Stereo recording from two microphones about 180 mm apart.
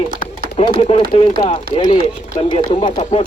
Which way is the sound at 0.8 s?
35° left (ahead or behind).